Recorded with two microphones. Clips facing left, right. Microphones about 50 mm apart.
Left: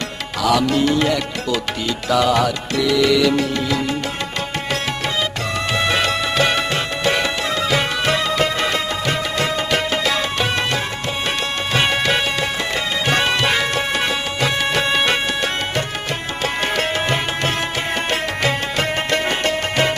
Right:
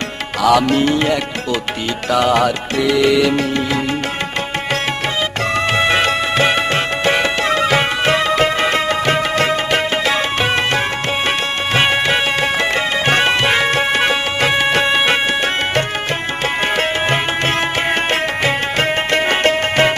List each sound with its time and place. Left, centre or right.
0.4 s music: right
2.0 s music: right
5.7 s music: right
12.4 s music: right
16.7 s music: right